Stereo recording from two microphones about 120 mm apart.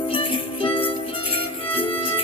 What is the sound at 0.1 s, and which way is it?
Music, 45° left (ahead or behind).